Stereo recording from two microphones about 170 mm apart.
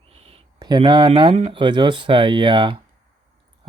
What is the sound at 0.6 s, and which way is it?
Speech, 25° right (ahead or behind).